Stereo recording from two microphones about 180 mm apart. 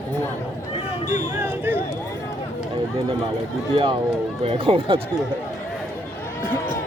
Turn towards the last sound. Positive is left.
turn(degrees=-30)  # may be behind; listen again after turning